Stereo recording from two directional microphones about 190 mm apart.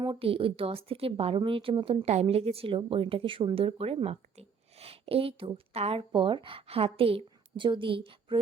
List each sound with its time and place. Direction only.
0.0 s a woman's voice: 30° right (ahead or behind)